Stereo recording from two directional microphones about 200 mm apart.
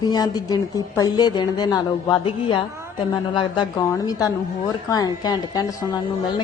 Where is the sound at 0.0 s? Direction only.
20° left (ahead or behind).